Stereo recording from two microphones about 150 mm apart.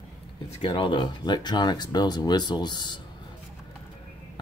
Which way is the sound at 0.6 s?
35° left (ahead or behind).